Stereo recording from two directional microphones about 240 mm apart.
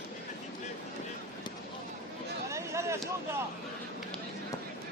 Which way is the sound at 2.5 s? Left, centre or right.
Centre.